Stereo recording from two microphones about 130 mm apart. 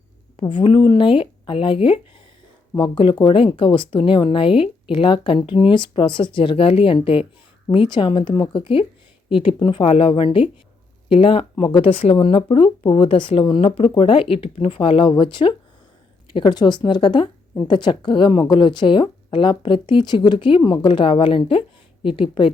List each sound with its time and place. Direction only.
0.3 s speech: 40° left (ahead or behind)